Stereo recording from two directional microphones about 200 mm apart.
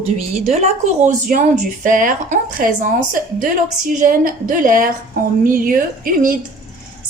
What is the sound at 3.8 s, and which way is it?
A woman's voice, 45° right (ahead or behind).